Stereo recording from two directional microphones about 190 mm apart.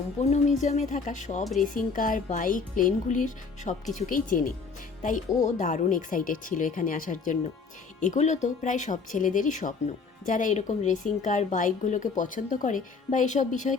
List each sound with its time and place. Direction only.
0.2 s a woman's voice: 35° left (ahead or behind)